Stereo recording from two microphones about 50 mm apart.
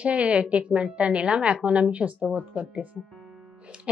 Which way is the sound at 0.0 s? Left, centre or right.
Right.